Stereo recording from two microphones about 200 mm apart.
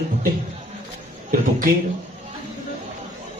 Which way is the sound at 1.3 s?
45° right (ahead or behind).